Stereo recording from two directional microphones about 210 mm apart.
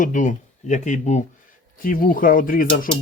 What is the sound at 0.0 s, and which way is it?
A man's voice, 35° left (ahead or behind).